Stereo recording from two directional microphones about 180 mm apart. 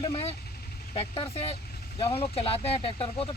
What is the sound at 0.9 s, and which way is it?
Speech, 30° left (ahead or behind).